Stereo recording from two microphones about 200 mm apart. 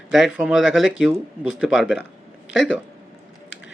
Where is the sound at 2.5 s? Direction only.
65° left (ahead or behind).